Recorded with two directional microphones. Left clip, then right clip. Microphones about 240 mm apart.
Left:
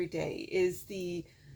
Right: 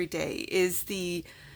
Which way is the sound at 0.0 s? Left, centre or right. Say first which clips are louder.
Right 3 dB; right.